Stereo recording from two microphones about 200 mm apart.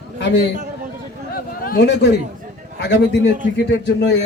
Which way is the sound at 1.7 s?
55° left (ahead or behind).